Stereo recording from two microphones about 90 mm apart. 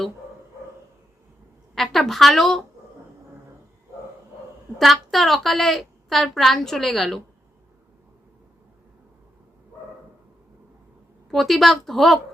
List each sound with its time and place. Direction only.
1.7 s a woman's voice: 5° left (ahead or behind)
4.8 s a woman's voice: centre (ahead or behind)
11.3 s a woman's voice: centre (ahead or behind)